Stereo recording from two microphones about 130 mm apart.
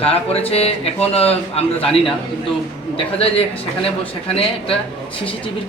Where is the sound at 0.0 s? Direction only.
50° left (ahead or behind).